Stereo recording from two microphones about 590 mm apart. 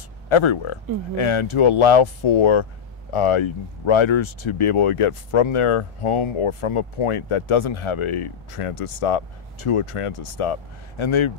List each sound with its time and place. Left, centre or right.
0.3 s speech: left